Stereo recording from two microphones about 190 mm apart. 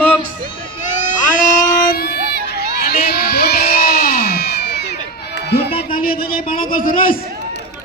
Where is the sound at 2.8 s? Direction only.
55° left (ahead or behind).